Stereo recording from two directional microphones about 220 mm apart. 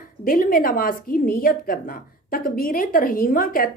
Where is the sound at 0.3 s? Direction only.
40° left (ahead or behind).